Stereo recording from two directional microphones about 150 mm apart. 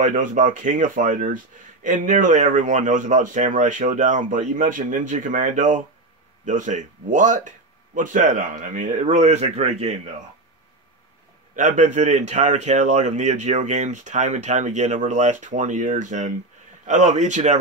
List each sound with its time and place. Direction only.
0.0 s speech: 60° right (ahead or behind)
11.5 s speech: 55° right (ahead or behind)